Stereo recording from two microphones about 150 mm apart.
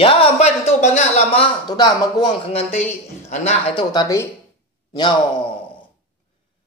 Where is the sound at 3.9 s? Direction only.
20° left (ahead or behind).